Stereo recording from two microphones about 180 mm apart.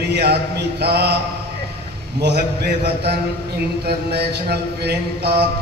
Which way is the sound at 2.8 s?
65° right (ahead or behind).